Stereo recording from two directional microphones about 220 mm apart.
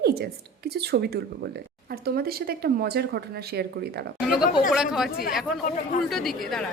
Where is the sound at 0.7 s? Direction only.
45° right (ahead or behind).